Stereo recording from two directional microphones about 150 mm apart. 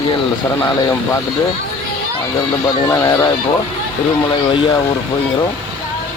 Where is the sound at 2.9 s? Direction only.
20° left (ahead or behind).